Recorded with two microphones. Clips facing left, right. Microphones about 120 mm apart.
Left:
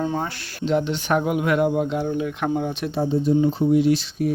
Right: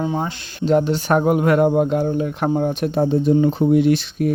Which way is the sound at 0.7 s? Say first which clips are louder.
Right 5 dB; 40° right (ahead or behind).